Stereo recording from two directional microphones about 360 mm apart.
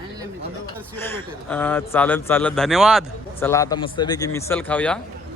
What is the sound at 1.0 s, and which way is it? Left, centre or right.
Speech, centre.